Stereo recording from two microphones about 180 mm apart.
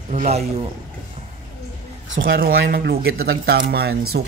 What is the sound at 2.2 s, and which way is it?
Speech, 55° right (ahead or behind).